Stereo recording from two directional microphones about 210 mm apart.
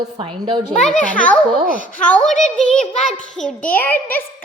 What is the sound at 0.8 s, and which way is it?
Speech, 5° left (ahead or behind).